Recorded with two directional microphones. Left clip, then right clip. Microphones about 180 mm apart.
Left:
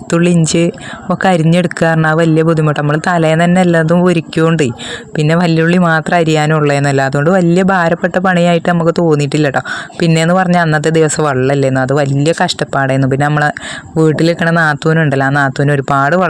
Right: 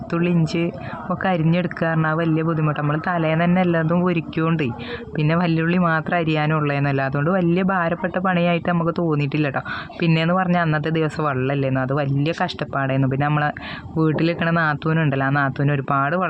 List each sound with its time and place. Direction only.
0.1 s speech: 45° left (ahead or behind)